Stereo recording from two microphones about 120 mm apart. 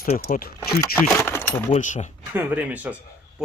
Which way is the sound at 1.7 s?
85° left.